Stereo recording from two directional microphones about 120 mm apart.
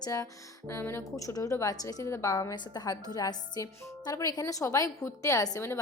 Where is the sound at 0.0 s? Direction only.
30° left (ahead or behind).